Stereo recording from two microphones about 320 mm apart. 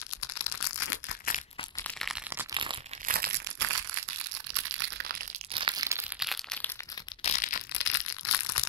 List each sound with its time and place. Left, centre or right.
0.2 s a sound: left
1.0 s crushing: left
1.8 s crushing: centre
3.2 s crushing: right
3.6 s crushing: right
5.5 s crumpling: centre
7.2 s crushing: left